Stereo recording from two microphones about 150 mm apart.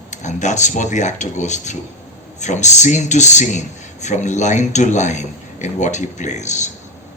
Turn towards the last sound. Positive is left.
turn(degrees=50)  # may be behind; listen again after turning